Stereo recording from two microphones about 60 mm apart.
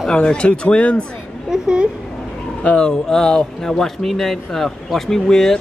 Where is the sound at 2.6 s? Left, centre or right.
Left.